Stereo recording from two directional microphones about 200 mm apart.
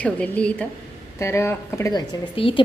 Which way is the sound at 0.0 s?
5° left (ahead or behind).